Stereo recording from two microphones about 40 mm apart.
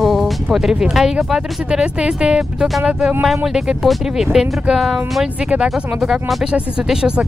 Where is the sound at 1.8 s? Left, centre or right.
Right.